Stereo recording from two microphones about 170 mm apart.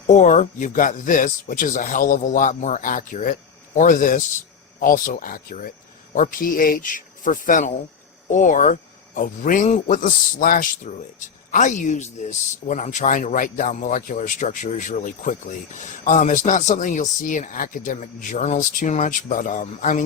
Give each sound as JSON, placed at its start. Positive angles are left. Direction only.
{"t": 0.1, "sound": "speech", "side_deg": 45}